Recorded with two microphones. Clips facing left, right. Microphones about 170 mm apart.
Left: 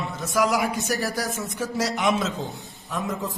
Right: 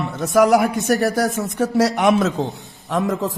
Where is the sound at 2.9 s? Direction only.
85° right.